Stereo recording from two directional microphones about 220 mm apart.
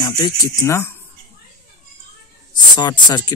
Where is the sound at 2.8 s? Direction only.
20° left (ahead or behind).